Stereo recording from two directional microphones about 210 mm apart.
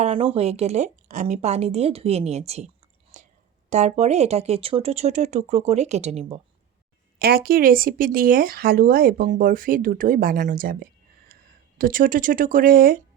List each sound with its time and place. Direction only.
0.0 s a sound: 30° right (ahead or behind)
0.3 s speech: 30° right (ahead or behind)
3.1 s whispering: 35° right (ahead or behind)
3.7 s speech: 35° right (ahead or behind)
7.2 s speech: 45° right (ahead or behind)